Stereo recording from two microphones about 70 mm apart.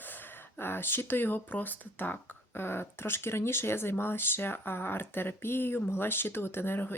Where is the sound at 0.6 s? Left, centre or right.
Left.